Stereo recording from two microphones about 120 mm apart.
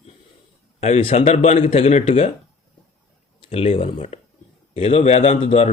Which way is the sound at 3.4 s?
55° left (ahead or behind).